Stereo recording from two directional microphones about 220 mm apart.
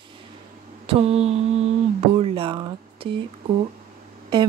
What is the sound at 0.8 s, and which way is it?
Speech, 25° right (ahead or behind).